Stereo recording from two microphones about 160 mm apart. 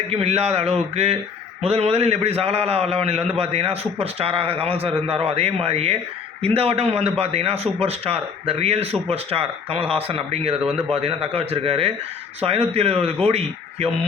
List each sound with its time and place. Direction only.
0.1 s a man's voice: 40° right (ahead or behind)